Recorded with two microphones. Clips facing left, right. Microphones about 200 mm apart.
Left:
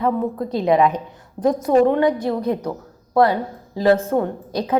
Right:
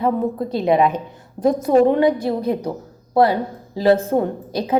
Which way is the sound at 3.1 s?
30° right (ahead or behind).